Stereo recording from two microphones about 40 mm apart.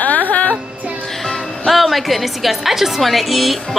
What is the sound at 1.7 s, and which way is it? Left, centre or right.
A woman's voice, centre.